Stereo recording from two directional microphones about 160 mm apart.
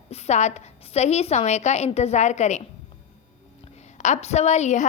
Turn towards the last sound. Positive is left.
turn(degrees=45)  # may be behind; listen again after turning